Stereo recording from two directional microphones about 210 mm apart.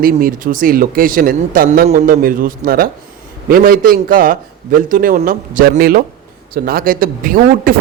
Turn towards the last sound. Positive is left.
turn(degrees=-40)  # may be behind; listen again after turning